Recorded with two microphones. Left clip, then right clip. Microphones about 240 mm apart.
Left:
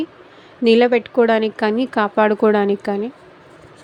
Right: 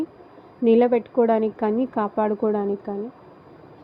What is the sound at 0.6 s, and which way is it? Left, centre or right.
A woman's voice, left.